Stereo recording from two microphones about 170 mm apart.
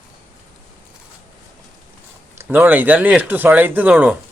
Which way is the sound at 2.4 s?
10° right (ahead or behind).